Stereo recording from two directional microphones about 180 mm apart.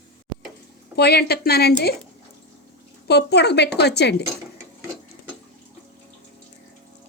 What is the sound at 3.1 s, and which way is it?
Speech, 65° left (ahead or behind).